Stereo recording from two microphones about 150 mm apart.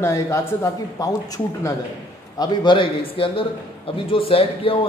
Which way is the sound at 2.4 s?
35° left (ahead or behind).